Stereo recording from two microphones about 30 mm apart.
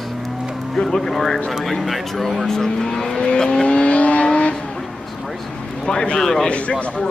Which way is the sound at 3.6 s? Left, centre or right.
Left.